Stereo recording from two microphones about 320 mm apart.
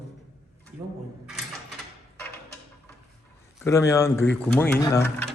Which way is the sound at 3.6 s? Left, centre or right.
Centre.